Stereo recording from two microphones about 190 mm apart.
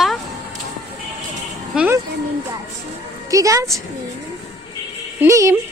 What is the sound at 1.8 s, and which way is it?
Speech, 10° right (ahead or behind).